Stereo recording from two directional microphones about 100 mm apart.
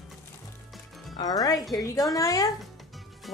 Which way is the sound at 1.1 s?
40° left (ahead or behind).